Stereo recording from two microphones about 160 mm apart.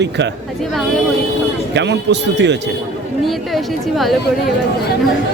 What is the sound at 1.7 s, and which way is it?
Speech, 90° right.